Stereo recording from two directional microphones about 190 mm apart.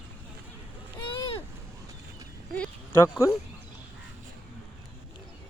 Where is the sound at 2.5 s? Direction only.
10° left (ahead or behind).